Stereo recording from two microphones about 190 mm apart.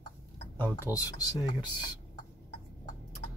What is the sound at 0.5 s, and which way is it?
Speech, 10° left (ahead or behind).